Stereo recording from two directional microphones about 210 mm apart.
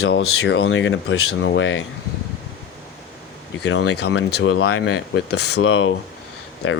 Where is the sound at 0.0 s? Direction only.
55° left (ahead or behind); by 1.5 s 80° left.